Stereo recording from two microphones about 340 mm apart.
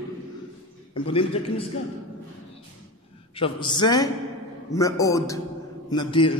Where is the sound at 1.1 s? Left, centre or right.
Centre.